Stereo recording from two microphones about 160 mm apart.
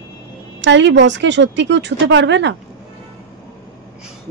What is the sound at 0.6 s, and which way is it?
Speech, 90° right.